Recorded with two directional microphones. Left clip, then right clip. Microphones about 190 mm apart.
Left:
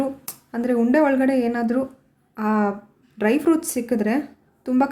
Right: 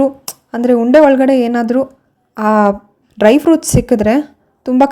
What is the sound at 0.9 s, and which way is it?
A woman's voice, 40° right (ahead or behind).